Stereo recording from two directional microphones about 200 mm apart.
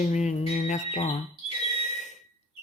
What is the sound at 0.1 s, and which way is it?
Music, 35° left (ahead or behind).